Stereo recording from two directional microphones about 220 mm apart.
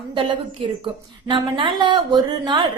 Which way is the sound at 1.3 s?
20° right (ahead or behind).